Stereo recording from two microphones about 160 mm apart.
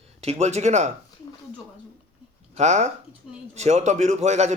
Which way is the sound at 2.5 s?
45° right (ahead or behind).